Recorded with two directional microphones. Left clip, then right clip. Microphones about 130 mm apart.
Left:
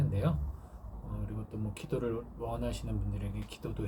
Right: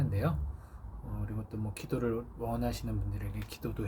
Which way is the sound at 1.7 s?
40° right (ahead or behind).